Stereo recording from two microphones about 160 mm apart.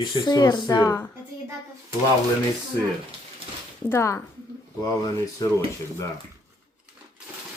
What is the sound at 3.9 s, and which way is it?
Speech, 15° left (ahead or behind).